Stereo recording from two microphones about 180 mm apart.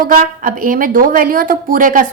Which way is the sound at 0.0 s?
50° right (ahead or behind).